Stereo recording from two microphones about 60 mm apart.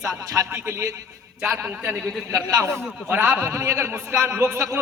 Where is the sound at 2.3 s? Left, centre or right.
Right.